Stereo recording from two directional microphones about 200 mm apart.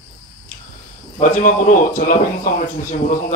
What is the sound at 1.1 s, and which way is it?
Speech, 40° left (ahead or behind).